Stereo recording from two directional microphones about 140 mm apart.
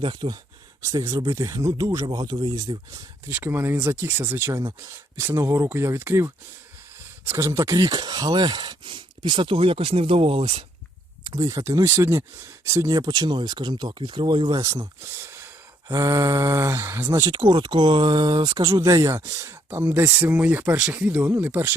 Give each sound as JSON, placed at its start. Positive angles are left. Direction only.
{"t": 0.0, "sound": "speech", "side_deg": -35}
{"t": 0.9, "sound": "speech", "side_deg": -25}
{"t": 3.2, "sound": "speech", "side_deg": -15}
{"t": 11.2, "sound": "speech", "side_deg": -25}